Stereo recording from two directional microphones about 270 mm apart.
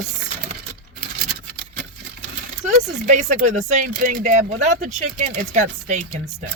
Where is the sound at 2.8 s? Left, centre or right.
Right.